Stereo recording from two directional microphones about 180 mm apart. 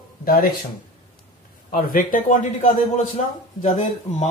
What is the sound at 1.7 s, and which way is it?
A man's voice, 50° left (ahead or behind).